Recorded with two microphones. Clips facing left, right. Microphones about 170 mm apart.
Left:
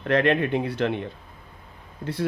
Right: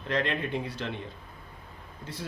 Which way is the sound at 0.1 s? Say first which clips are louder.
Left 9 dB; 65° left (ahead or behind).